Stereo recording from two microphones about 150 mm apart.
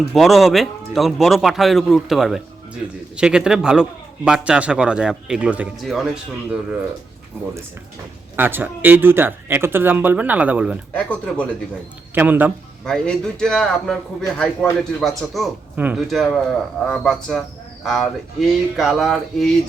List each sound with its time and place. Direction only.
0.1 s a man's voice: centre (ahead or behind)
8.4 s speech: 15° right (ahead or behind)
10.9 s speech: 10° left (ahead or behind)
12.1 s speech: 10° right (ahead or behind)
12.8 s a man's voice: 5° left (ahead or behind)
15.7 s speech: 10° right (ahead or behind)
16.0 s a man's voice: centre (ahead or behind)